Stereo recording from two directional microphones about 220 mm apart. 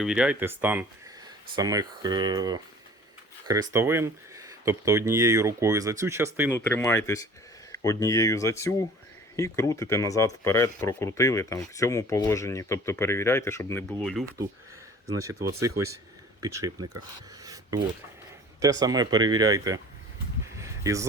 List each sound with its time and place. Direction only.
0.0 s speech: 5° right (ahead or behind)
6.5 s speech: 10° left (ahead or behind)
15.6 s speech: 15° right (ahead or behind)
17.4 s a sound: 15° right (ahead or behind)
18.6 s speech: 15° right (ahead or behind)
20.6 s a sound: 15° right (ahead or behind)